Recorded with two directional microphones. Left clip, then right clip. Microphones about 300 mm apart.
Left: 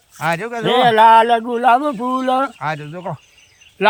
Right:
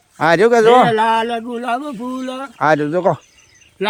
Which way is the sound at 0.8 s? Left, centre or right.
Centre.